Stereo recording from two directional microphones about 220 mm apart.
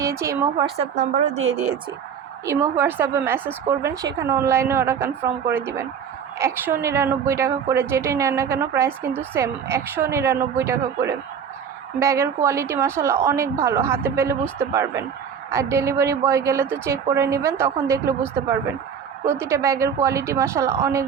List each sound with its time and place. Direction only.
0.0 s a woman's voice: 15° right (ahead or behind)
0.8 s a woman's voice: 35° right (ahead or behind)
2.5 s a woman's voice: 10° right (ahead or behind)
19.2 s a woman's voice: 10° right (ahead or behind)